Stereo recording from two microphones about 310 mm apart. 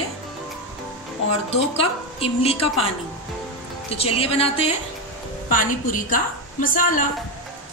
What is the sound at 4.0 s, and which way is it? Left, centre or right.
A woman's voice, centre.